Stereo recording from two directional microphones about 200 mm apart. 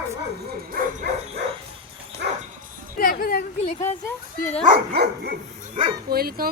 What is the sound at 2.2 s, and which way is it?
Dog, 55° right (ahead or behind).